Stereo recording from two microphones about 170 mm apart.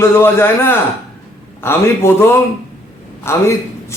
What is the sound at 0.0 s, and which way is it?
A man's voice, 15° left (ahead or behind).